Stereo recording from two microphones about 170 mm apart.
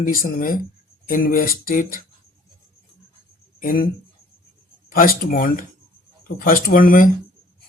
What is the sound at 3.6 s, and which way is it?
Speech, 55° left (ahead or behind).